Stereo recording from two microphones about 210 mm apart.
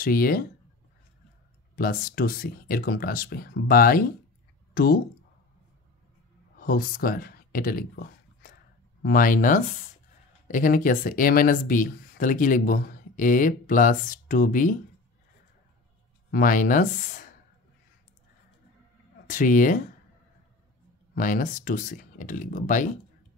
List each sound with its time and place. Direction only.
0.0 s speech: 45° left (ahead or behind)
1.8 s speech: 40° left (ahead or behind)
6.6 s speech: 40° left (ahead or behind)
16.3 s speech: 40° left (ahead or behind)
19.2 s speech: 40° left (ahead or behind)
21.1 s speech: 40° left (ahead or behind)